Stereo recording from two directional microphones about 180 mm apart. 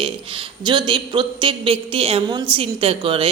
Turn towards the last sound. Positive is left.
turn(degrees=-30)  # may be behind; listen again after turning